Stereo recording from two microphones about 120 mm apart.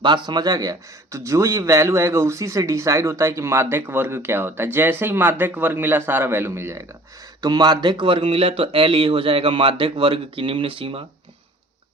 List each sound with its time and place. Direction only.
0.0 s speech: 35° right (ahead or behind); by 6.8 s 20° right (ahead or behind)
7.4 s speech: 35° right (ahead or behind)